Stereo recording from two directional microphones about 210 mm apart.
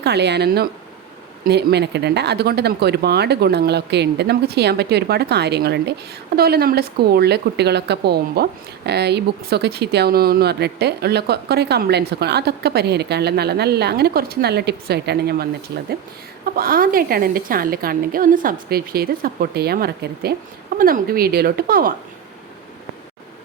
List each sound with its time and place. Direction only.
0.0 s speech: 55° right (ahead or behind)